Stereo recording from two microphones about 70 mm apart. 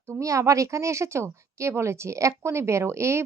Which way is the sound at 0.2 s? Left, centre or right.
Right.